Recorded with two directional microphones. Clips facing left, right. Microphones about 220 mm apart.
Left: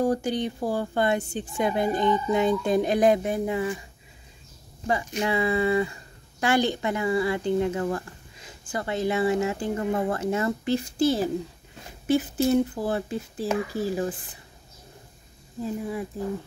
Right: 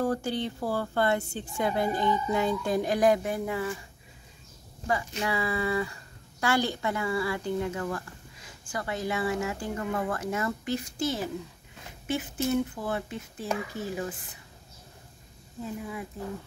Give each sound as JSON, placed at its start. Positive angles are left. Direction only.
{"t": 0.0, "sound": "speech", "side_deg": 15}
{"t": 4.8, "sound": "speech", "side_deg": 20}
{"t": 15.8, "sound": "speech", "side_deg": 35}